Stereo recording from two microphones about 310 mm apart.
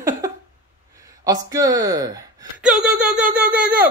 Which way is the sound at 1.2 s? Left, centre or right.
Centre.